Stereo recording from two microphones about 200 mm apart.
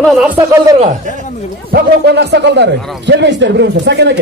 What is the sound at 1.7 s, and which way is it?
A man's voice, 55° right (ahead or behind).